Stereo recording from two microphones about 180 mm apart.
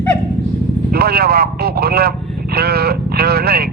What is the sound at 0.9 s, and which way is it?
Speech, 60° right (ahead or behind).